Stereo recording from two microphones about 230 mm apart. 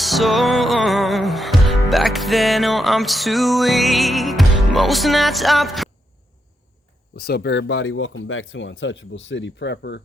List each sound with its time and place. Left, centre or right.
0.0 s music: centre
7.2 s speech: left